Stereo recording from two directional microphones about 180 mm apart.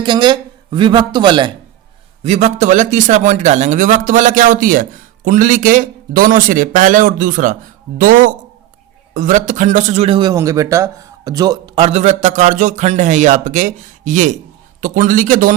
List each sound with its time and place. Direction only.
0.0 s a man's voice: 25° right (ahead or behind)
2.2 s a man's voice: 40° right (ahead or behind)